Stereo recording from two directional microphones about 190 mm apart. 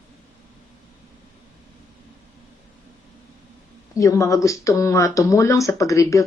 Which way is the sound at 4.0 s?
15° left (ahead or behind).